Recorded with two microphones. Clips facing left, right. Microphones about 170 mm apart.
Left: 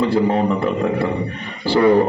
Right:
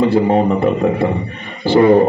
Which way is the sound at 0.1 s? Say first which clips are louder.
Right 4 dB; 25° right (ahead or behind).